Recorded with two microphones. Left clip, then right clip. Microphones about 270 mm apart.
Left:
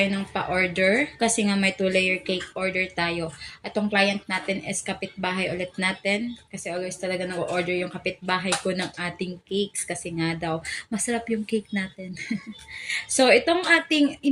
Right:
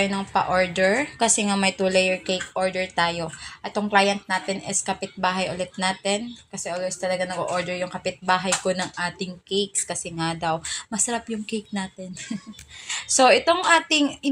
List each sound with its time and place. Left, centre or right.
0.0 s speech: centre
12.9 s speech: centre